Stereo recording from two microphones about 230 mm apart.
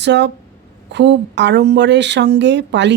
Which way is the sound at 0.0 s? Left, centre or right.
Right.